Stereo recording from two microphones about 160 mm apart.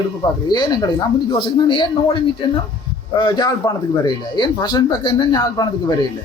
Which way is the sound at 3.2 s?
25° left (ahead or behind).